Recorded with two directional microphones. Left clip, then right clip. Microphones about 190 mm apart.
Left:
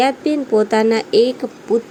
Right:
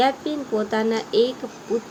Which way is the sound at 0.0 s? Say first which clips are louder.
Left 5 dB; 45° left (ahead or behind).